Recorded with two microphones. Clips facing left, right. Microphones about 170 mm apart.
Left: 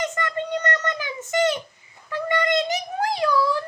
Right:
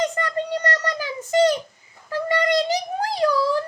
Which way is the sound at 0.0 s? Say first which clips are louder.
Right 3 dB; 35° right (ahead or behind).